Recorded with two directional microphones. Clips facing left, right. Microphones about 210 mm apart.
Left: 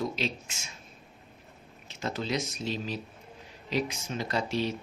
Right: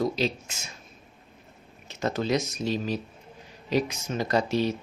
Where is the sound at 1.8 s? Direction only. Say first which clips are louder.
Right 6 dB; 45° right (ahead or behind).